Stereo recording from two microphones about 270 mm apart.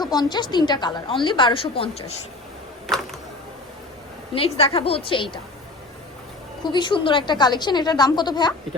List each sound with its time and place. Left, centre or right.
0.0 s a woman's voice: centre
2.8 s a sound: centre
4.4 s a woman's voice: left
6.6 s a woman's voice: centre